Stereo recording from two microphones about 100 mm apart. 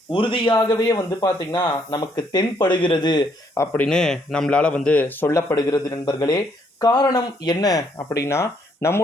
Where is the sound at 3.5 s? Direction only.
25° left (ahead or behind).